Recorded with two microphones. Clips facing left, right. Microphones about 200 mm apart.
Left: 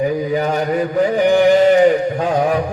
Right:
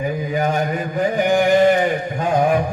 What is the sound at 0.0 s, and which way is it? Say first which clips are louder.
Mantra: left 6 dB; 40° left (ahead or behind).